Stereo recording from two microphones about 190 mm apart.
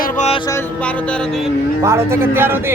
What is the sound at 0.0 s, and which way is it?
Music, 35° left (ahead or behind).